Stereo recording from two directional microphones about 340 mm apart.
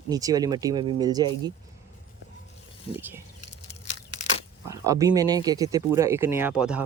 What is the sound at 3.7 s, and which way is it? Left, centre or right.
Tearing, centre.